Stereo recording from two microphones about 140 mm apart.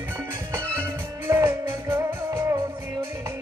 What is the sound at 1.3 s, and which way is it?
Music, 20° right (ahead or behind).